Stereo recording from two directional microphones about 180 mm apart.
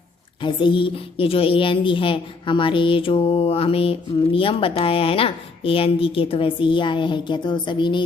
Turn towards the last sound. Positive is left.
turn(degrees=25)  # may be behind; listen again after turning